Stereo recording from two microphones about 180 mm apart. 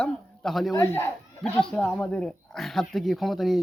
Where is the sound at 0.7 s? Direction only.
15° left (ahead or behind).